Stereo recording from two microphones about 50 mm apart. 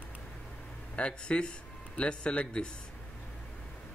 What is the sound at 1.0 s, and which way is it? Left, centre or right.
Speech, left.